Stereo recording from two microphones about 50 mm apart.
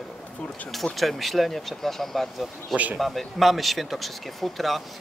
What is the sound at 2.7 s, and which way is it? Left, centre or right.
Speech, right.